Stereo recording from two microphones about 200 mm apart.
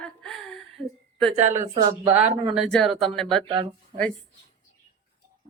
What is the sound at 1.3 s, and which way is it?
Speech, 35° right (ahead or behind).